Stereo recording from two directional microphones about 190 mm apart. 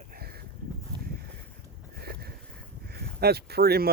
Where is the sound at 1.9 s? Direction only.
55° right (ahead or behind).